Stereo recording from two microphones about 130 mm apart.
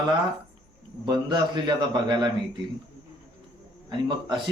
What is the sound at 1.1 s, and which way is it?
A man's voice, 35° right (ahead or behind).